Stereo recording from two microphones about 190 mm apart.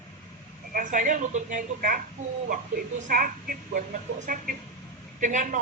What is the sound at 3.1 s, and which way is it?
A woman's voice, 45° right (ahead or behind).